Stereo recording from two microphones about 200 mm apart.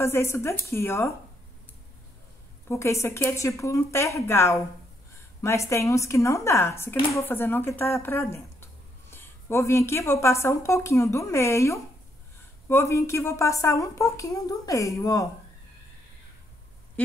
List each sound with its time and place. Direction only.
0.0 s a woman's voice: 15° left (ahead or behind)
2.7 s a woman's voice: 15° left (ahead or behind)